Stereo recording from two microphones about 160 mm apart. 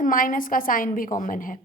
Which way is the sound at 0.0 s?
55° left (ahead or behind).